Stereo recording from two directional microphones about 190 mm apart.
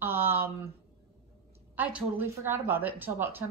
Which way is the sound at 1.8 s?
10° right (ahead or behind).